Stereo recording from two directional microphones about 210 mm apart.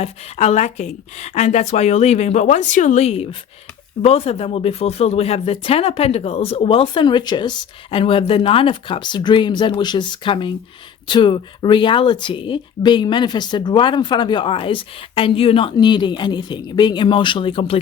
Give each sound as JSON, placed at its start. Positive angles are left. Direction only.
{"t": 0.0, "sound": "a woman's voice", "side_deg": 30}